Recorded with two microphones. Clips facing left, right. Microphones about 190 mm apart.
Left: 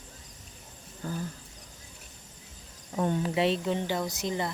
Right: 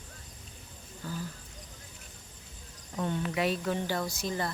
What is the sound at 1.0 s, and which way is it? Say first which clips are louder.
Speech: left 3 dB; 50° left (ahead or behind).